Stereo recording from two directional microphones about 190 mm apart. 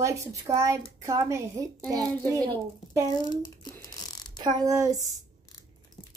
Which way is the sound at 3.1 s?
20° left (ahead or behind).